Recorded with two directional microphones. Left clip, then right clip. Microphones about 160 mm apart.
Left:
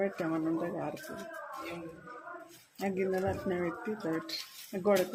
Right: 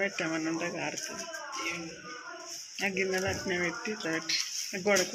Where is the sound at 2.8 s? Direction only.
20° left (ahead or behind).